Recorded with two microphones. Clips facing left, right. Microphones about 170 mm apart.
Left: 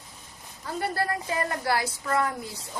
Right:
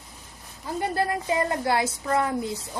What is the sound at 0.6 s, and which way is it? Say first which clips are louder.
A woman's voice: right 3 dB; 20° right (ahead or behind).